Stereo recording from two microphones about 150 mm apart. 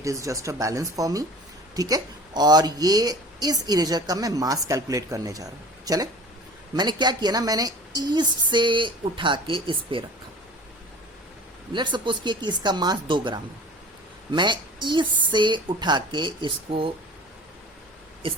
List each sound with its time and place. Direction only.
0.0 s a woman's voice: 20° right (ahead or behind)
11.7 s a woman's voice: 30° right (ahead or behind)